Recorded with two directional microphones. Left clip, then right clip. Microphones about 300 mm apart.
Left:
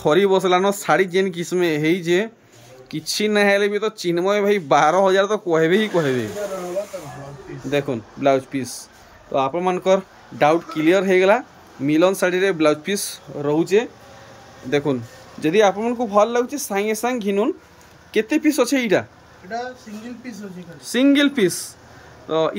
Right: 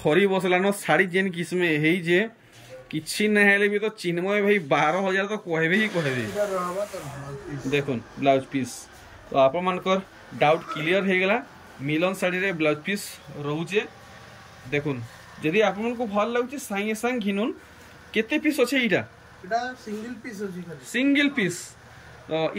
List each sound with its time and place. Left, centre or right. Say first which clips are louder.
0.0 s speech: left 5 dB; centre
7.6 s speech: left 4 dB; centre
14.7 s speech: left 7 dB; centre
20.9 s speech: left 6 dB; centre